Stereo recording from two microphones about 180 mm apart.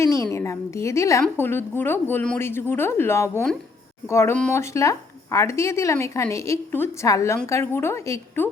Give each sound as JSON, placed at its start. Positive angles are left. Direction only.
{"t": 0.0, "sound": "speech", "side_deg": 15}